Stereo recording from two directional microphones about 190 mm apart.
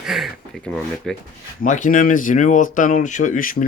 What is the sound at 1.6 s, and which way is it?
Speech, 40° left (ahead or behind).